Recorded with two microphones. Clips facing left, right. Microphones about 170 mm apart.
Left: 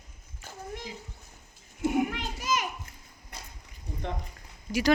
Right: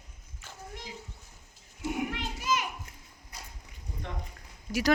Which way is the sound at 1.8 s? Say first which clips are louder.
Left 5 dB; 50° left (ahead or behind).